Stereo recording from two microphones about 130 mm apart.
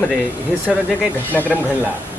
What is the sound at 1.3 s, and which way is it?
Speech, 15° left (ahead or behind).